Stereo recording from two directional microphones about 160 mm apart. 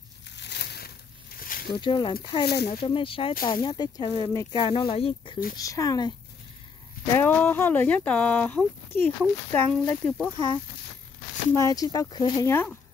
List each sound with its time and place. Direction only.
0.4 s crushing: 90° left
1.4 s a sound: 65° left (ahead or behind)
1.8 s speech: 30° left (ahead or behind)
2.4 s speech: 90° left
2.7 s speech: 35° left (ahead or behind)
5.6 s speech: 20° left (ahead or behind)
7.1 s speech: 10° left (ahead or behind)
11.5 s speech: 20° left (ahead or behind)